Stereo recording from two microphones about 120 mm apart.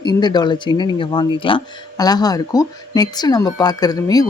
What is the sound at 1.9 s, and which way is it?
Speech, 35° left (ahead or behind).